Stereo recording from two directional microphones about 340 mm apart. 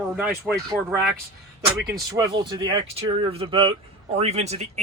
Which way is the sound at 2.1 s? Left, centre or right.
Centre.